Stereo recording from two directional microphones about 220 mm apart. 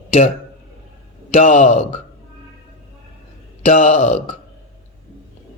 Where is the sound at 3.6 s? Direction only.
35° left (ahead or behind).